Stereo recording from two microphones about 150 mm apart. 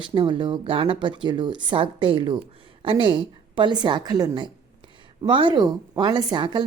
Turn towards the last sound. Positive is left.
turn(degrees=-30)  # may be behind; listen again after turning